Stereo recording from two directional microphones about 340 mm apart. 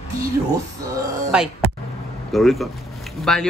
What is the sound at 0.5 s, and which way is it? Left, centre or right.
Speech, centre.